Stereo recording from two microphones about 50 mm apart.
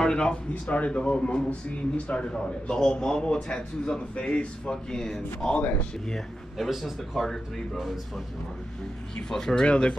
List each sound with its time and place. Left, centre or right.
0.0 s a man's voice: centre
9.3 s speech: centre
9.7 s a man's voice: left